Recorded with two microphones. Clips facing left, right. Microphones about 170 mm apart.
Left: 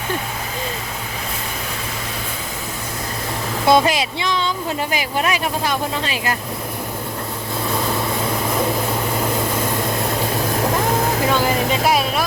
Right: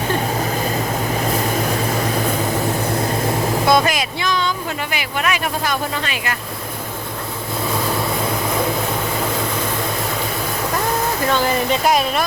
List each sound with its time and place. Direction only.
3.7 s speech: 30° left (ahead or behind)
11.3 s speech: 5° left (ahead or behind)